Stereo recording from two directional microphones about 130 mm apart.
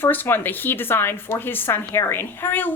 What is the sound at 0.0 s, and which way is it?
A woman's voice, 15° left (ahead or behind).